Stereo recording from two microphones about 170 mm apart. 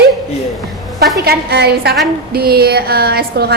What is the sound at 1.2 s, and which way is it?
A woman's voice, 75° right (ahead or behind).